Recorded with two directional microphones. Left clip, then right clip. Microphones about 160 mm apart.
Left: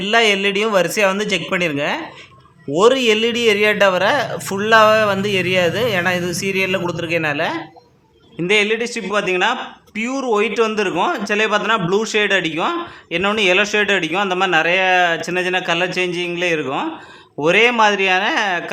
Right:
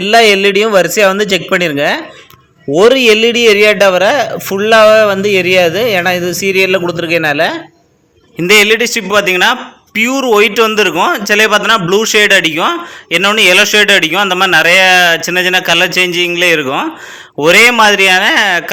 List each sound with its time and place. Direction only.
0.0 s a man's voice: 25° right (ahead or behind)